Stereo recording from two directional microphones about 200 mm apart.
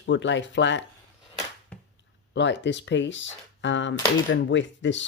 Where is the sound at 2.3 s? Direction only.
65° left (ahead or behind).